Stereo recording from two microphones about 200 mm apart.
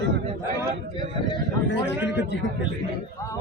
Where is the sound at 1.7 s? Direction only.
65° left (ahead or behind).